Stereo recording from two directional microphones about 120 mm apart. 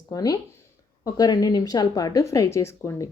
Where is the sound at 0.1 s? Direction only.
30° left (ahead or behind).